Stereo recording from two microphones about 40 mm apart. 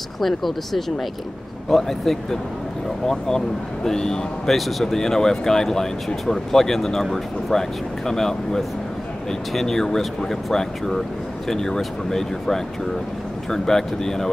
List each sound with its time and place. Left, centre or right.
0.2 s speech: centre
4.6 s speech: centre